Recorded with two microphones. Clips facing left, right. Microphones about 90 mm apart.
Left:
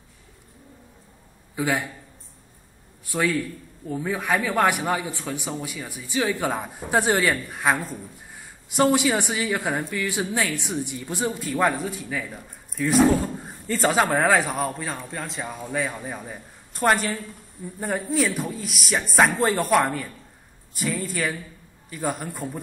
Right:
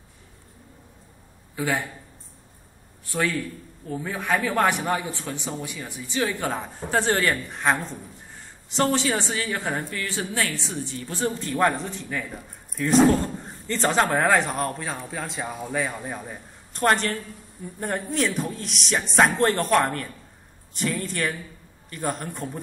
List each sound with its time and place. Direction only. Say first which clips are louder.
1.5 s a man's voice: left 1 dB; 15° left (ahead or behind)
3.1 s a man's voice: left 2 dB; 10° left (ahead or behind)